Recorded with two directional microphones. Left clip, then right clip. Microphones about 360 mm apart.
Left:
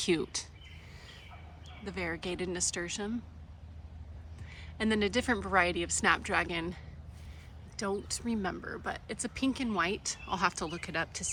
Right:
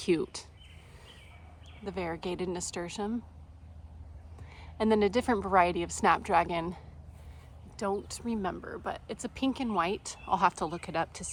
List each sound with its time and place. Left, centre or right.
0.0 s speech: centre
1.8 s speech: centre
4.4 s speech: centre
8.0 s speech: centre